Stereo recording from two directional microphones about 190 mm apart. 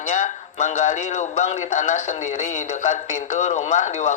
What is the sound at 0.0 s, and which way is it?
A man's voice, 40° left (ahead or behind).